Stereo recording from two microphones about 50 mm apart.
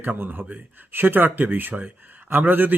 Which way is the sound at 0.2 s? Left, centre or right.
Right.